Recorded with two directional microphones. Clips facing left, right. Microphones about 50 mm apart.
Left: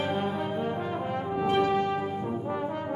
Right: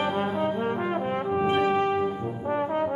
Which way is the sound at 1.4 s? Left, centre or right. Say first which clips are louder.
Right 1 dB; right.